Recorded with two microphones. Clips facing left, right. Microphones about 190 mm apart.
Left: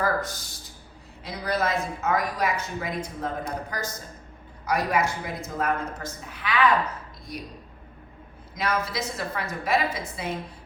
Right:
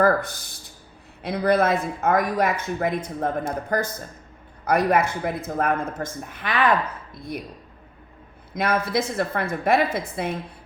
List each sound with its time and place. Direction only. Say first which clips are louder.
0.0 s a woman's voice: right 7 dB; 60° right (ahead or behind)
8.5 s a woman's voice: right 5 dB; 55° right (ahead or behind)